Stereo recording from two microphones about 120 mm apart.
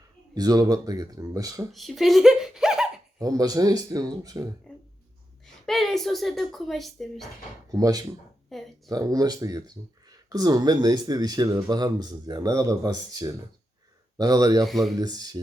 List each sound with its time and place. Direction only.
0.3 s speech: 30° right (ahead or behind)
1.7 s a sound: centre (ahead or behind)
3.2 s speech: 30° right (ahead or behind)
5.6 s speech: centre (ahead or behind)
7.7 s speech: 30° right (ahead or behind)
8.5 s speech: centre (ahead or behind)
8.9 s speech: 30° right (ahead or behind)
14.6 s speech: centre (ahead or behind)
14.9 s speech: 35° right (ahead or behind)